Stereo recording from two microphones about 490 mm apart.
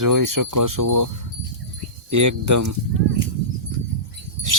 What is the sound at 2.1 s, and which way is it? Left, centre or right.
Speech, right.